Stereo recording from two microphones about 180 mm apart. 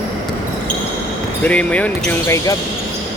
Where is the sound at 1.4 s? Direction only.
5° left (ahead or behind).